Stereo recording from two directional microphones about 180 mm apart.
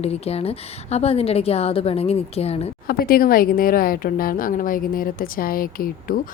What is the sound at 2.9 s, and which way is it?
A woman's voice, 55° left (ahead or behind).